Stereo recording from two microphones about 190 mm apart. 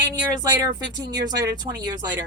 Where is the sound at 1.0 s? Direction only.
20° right (ahead or behind).